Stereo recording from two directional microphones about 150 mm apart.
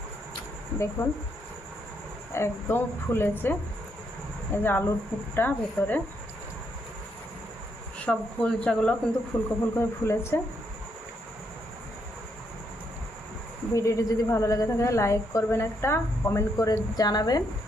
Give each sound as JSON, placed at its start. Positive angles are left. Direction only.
{"t": 1.0, "sound": "speech", "side_deg": 15}
{"t": 2.3, "sound": "speech", "side_deg": 15}
{"t": 7.9, "sound": "speech", "side_deg": 10}
{"t": 9.3, "sound": "a woman's voice", "side_deg": 20}
{"t": 13.7, "sound": "a woman's voice", "side_deg": 20}